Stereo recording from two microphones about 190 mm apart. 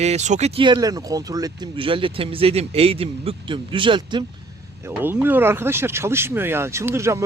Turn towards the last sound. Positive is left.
turn(degrees=-15)  # may be behind; listen again after turning